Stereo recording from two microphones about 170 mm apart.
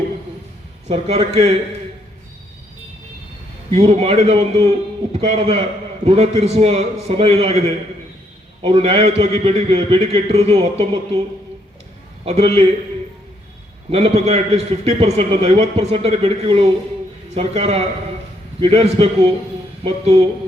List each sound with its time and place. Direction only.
0.9 s a man's voice: 35° right (ahead or behind)
3.7 s a man's voice: 35° right (ahead or behind)
8.6 s a man's voice: 35° right (ahead or behind)
12.2 s a man's voice: 35° right (ahead or behind)
13.9 s a man's voice: 35° right (ahead or behind)